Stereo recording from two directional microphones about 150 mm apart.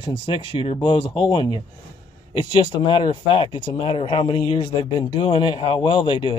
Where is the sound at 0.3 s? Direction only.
35° left (ahead or behind).